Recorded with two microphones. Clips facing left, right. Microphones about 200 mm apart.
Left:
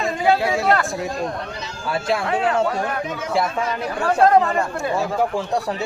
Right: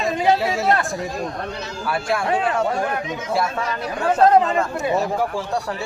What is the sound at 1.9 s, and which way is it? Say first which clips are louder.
Speech: left 1 dB; 20° left (ahead or behind).